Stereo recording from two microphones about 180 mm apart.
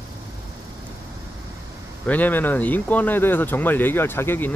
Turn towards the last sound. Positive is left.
turn(degrees=10)  # may be behind; listen again after turning